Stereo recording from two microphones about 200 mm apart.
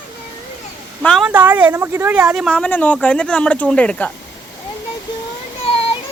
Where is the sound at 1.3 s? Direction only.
10° right (ahead or behind).